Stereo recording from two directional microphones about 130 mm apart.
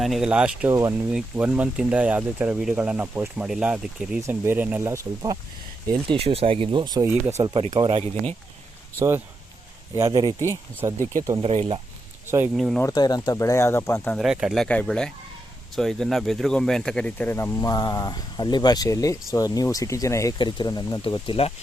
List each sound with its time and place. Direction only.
0.0 s speech: 5° right (ahead or behind)
0.7 s speech: 20° right (ahead or behind)
1.1 s speech: 10° right (ahead or behind)
5.9 s speech: 45° right (ahead or behind)
7.5 s speech: 45° right (ahead or behind)
9.0 s speech: 20° right (ahead or behind)
11.4 s speech: 50° right (ahead or behind)
12.5 s speech: centre (ahead or behind)
12.8 s speech: 30° left (ahead or behind)
14.2 s speech: 5° right (ahead or behind); by 20.3 s 25° left (ahead or behind)
20.4 s speech: 35° left (ahead or behind)
21.0 s speech: 40° left (ahead or behind)